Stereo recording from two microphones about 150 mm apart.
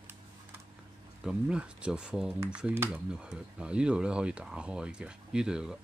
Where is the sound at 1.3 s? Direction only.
5° right (ahead or behind).